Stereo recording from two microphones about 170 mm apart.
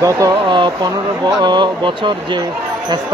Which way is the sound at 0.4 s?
30° right (ahead or behind).